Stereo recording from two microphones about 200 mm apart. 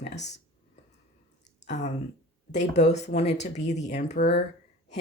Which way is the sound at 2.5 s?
35° left (ahead or behind).